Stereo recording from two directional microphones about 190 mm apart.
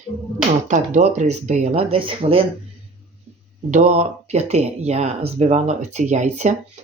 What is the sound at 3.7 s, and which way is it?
Speech, 40° right (ahead or behind).